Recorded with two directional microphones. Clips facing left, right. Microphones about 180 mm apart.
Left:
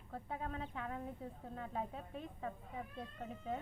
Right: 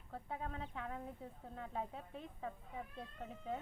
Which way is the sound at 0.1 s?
Centre (ahead or behind).